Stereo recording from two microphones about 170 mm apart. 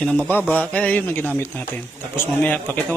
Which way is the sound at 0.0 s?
5° left (ahead or behind).